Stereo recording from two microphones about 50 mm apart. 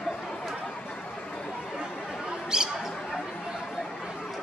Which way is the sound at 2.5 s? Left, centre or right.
Centre.